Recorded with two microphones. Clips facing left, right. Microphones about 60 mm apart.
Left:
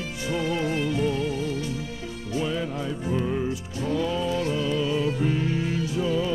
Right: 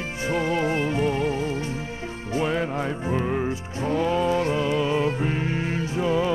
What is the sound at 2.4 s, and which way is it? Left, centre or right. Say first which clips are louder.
Music: right 3 dB; right.